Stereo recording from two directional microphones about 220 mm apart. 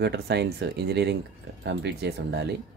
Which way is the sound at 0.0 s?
50° right (ahead or behind).